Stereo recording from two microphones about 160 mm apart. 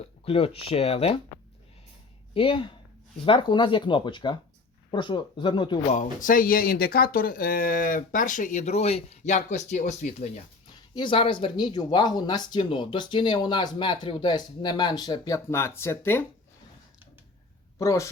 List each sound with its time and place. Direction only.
0.3 s speech: 35° left (ahead or behind)
2.3 s speech: 35° left (ahead or behind)
5.9 s speech: 55° left (ahead or behind)
10.9 s speech: 30° left (ahead or behind); by 16.2 s 15° left (ahead or behind)
17.7 s speech: 20° left (ahead or behind)